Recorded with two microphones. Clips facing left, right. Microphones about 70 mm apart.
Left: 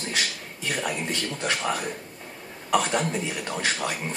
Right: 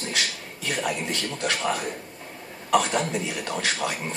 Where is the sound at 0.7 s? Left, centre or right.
Centre.